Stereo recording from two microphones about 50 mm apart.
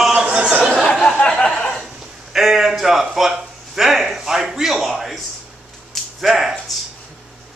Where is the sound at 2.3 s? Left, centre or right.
Centre.